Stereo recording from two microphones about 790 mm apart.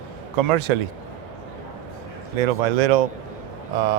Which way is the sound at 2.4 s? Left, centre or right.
Right.